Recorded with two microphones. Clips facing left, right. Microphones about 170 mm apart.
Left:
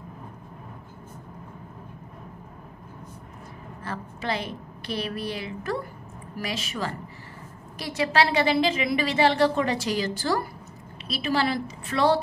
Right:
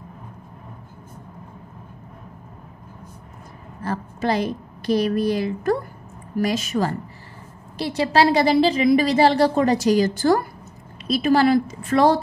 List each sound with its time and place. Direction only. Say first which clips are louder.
3.8 s a woman's voice: right 8 dB; 40° right (ahead or behind)
7.7 s a woman's voice: right 5 dB; 30° right (ahead or behind)